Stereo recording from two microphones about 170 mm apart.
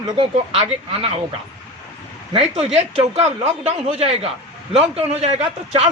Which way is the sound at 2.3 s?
35° right (ahead or behind).